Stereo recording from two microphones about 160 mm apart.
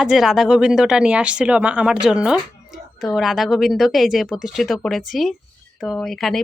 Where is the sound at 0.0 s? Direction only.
Centre (ahead or behind).